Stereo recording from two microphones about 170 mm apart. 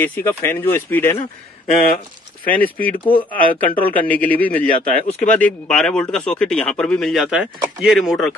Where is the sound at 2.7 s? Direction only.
10° left (ahead or behind).